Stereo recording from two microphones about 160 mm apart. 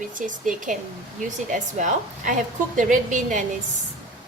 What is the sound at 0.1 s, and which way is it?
A woman's voice, 55° right (ahead or behind).